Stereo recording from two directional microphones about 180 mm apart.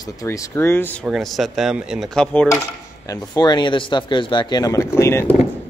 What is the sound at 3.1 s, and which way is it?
Speech, 25° left (ahead or behind).